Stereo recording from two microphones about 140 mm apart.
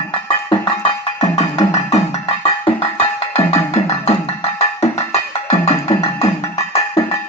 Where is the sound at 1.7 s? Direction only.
50° left (ahead or behind).